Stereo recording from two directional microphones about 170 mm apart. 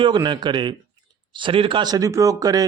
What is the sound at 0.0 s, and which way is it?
A man's voice, 25° right (ahead or behind).